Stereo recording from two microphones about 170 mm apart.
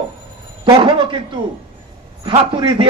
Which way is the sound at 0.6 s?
30° right (ahead or behind).